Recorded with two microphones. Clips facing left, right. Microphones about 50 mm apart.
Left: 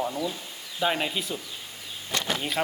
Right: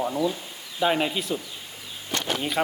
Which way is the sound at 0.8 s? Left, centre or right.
Centre.